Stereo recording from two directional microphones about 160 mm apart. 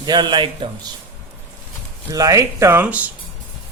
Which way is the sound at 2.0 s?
20° right (ahead or behind).